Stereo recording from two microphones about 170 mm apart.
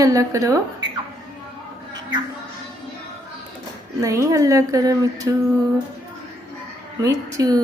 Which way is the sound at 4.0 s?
20° right (ahead or behind).